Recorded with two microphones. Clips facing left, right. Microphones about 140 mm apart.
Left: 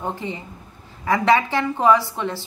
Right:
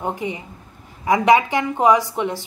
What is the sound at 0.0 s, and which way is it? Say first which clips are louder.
Speech: right 3 dB; 15° right (ahead or behind).